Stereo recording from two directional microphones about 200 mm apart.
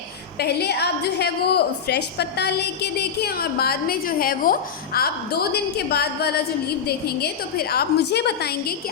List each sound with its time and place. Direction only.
0.3 s a woman's voice: 55° left (ahead or behind)